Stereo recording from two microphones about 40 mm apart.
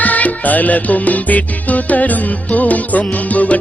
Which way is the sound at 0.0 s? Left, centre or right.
Left.